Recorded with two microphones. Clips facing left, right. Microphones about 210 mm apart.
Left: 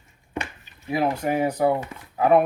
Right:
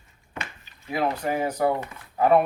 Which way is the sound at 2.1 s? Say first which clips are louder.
Left 1 dB; centre (ahead or behind).